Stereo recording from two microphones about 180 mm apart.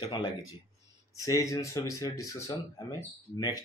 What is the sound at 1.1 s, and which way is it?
Speech, 20° left (ahead or behind).